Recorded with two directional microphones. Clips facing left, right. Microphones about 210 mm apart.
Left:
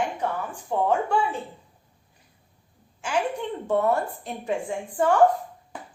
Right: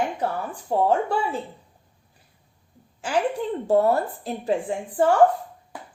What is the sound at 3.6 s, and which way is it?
Speech, 35° right (ahead or behind).